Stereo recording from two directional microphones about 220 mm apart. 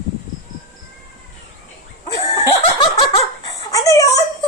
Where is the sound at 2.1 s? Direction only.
15° left (ahead or behind).